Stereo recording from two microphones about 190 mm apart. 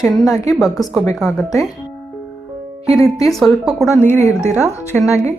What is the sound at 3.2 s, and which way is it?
Speech, centre (ahead or behind).